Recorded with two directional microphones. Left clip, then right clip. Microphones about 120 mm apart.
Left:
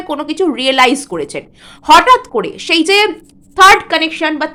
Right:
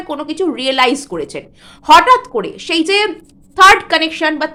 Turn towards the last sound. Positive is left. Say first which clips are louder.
# even
turn(degrees=20)  # may be behind; listen again after turning